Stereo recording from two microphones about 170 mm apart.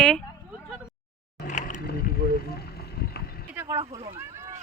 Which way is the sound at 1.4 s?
45° left (ahead or behind).